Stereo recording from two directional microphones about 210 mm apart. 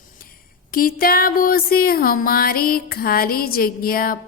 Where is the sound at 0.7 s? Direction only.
45° left (ahead or behind).